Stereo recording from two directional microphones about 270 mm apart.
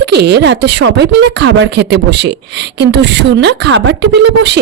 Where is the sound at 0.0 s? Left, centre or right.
Right.